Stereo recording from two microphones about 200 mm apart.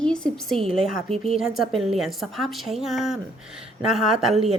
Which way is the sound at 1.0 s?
30° right (ahead or behind).